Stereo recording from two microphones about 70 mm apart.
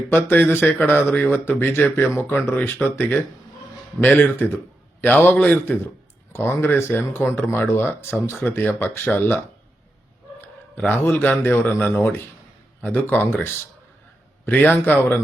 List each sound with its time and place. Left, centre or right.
0.1 s a man's voice: left
10.4 s a sound: left
11.2 s a man's voice: left